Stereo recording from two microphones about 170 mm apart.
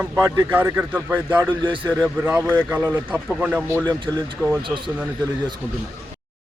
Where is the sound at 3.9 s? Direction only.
25° right (ahead or behind).